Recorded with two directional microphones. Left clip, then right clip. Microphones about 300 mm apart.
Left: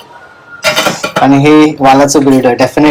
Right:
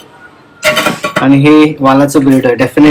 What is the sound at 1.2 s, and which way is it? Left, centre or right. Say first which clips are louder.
Speech: left 1 dB; centre.